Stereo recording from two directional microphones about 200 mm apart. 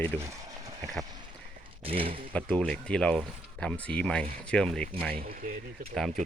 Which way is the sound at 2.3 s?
5° left (ahead or behind).